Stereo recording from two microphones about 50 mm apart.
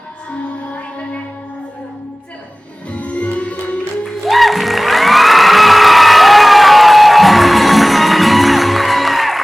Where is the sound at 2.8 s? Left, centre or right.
Left.